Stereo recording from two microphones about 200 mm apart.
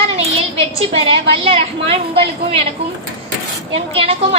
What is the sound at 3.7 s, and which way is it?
Speech, 30° right (ahead or behind).